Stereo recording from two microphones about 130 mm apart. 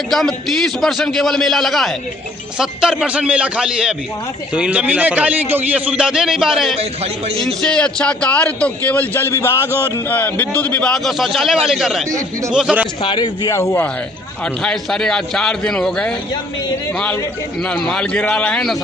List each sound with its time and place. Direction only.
0.1 s a man's voice: centre (ahead or behind)
6.7 s a man's voice: 50° right (ahead or behind)
7.3 s a man's voice: 5° left (ahead or behind)
13.0 s speech: 35° left (ahead or behind)
13.5 s a man's voice: 20° left (ahead or behind)
14.4 s a man's voice: 5° left (ahead or behind)
17.6 s a man's voice: 5° left (ahead or behind)